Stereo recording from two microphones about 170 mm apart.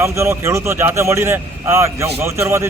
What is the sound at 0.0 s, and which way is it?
A man's voice, 15° right (ahead or behind).